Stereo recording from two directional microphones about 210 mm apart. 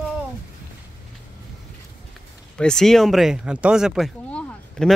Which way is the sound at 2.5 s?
5° left (ahead or behind).